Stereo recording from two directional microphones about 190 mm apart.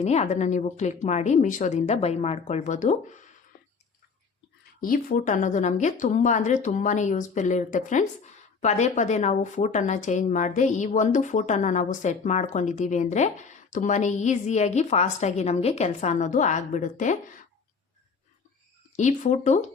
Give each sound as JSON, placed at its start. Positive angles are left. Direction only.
{"t": 0.0, "sound": "speech", "side_deg": 35}
{"t": 4.8, "sound": "speech", "side_deg": 50}
{"t": 18.9, "sound": "speech", "side_deg": 40}